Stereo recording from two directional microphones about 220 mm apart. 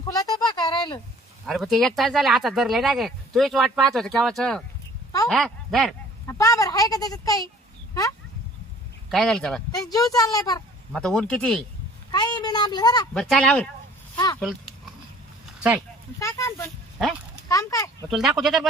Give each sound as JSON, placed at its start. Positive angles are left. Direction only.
{"t": 0.1, "sound": "a sound", "side_deg": 15}
{"t": 1.5, "sound": "speech", "side_deg": 0}
{"t": 6.2, "sound": "speech", "side_deg": 15}
{"t": 9.0, "sound": "speech", "side_deg": 0}
{"t": 9.7, "sound": "speech", "side_deg": 15}
{"t": 10.9, "sound": "speech", "side_deg": 5}
{"t": 12.1, "sound": "speech", "side_deg": 20}
{"t": 13.1, "sound": "speech", "side_deg": 0}
{"t": 16.1, "sound": "speech", "side_deg": 15}
{"t": 18.1, "sound": "speech", "side_deg": 0}